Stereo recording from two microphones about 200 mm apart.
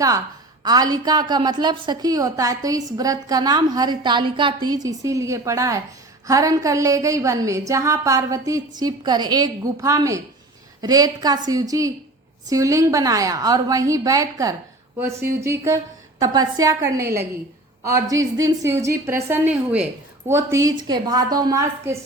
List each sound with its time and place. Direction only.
0.6 s a woman's voice: 20° right (ahead or behind)